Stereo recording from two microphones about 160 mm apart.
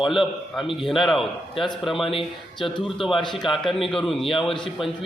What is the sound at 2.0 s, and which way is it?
Speech, 35° left (ahead or behind).